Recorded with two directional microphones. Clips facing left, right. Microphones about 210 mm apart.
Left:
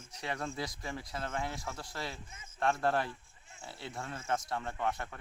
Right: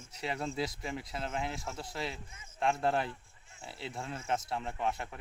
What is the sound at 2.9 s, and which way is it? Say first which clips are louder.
Speech: even; 25° right (ahead or behind).